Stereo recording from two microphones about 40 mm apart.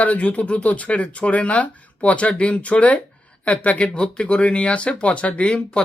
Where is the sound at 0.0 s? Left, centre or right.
Left.